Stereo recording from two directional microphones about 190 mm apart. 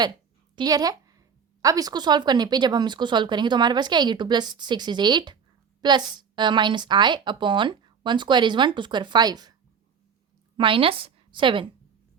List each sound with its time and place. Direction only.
0.5 s a woman's voice: 20° right (ahead or behind)
10.6 s a woman's voice: 30° right (ahead or behind)